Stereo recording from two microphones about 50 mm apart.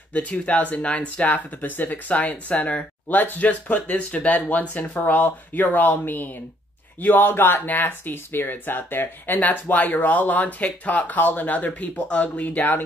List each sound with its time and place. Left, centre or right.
0.1 s speech: left
7.6 s speech: left